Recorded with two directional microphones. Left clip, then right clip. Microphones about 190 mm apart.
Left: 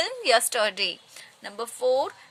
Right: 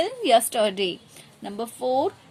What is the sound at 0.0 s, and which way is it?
A woman's voice, 15° left (ahead or behind).